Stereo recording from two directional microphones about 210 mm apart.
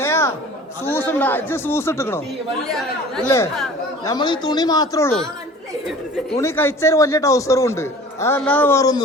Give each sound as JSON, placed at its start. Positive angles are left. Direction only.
{"t": 0.0, "sound": "chatter", "side_deg": 10}
{"t": 0.9, "sound": "a man's voice", "side_deg": 10}
{"t": 3.2, "sound": "a man's voice", "side_deg": 15}
{"t": 6.3, "sound": "a man's voice", "side_deg": 10}